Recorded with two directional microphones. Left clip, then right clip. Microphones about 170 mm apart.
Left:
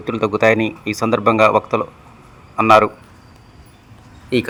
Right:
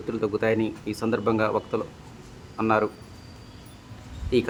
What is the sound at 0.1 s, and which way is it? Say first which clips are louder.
Speech: left 10 dB; 20° left (ahead or behind).